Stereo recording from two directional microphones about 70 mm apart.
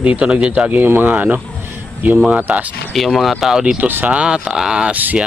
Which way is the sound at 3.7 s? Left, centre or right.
Right.